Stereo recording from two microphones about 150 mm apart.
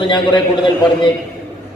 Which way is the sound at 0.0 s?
30° left (ahead or behind).